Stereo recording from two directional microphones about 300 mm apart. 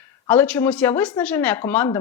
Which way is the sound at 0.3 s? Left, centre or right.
Centre.